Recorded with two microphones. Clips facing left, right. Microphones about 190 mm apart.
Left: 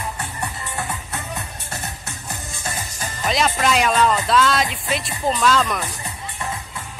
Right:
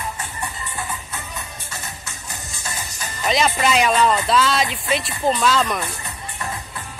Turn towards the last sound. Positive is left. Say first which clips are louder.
# even
turn(degrees=0)  # may be behind; listen again after turning